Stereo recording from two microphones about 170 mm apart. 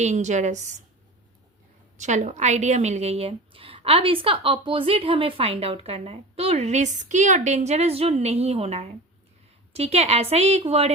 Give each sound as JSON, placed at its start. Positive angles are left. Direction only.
{"t": 0.0, "sound": "a woman's voice", "side_deg": -45}
{"t": 2.0, "sound": "a woman's voice", "side_deg": -45}